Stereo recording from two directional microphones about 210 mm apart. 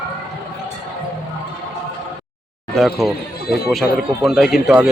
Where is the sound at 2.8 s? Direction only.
Centre (ahead or behind).